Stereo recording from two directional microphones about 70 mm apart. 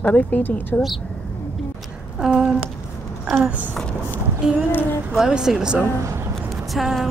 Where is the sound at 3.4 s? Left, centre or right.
Right.